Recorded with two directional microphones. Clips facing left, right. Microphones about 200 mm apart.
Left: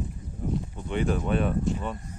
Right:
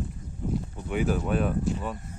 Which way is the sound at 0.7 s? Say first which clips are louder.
Right 1 dB; 5° right (ahead or behind).